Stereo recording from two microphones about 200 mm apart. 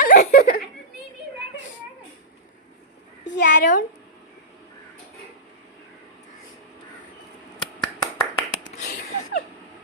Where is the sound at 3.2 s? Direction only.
40° left (ahead or behind).